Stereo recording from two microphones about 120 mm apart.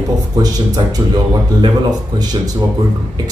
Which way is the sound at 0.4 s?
30° right (ahead or behind).